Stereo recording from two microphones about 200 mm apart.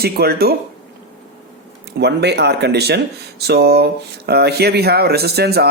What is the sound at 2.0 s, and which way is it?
Speech, 55° right (ahead or behind).